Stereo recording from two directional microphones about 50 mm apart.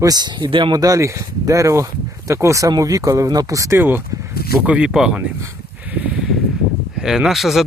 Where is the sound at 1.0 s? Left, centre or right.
Right.